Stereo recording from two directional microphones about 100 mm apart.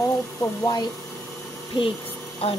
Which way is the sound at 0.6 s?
40° left (ahead or behind).